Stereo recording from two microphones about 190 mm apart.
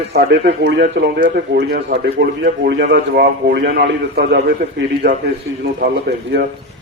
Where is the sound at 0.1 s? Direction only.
55° right (ahead or behind).